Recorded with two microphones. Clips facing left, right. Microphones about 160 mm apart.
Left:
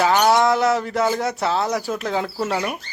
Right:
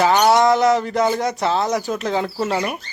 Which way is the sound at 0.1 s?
10° right (ahead or behind).